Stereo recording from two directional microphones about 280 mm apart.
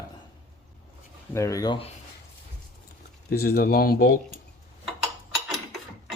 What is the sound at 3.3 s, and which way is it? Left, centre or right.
Speech, left.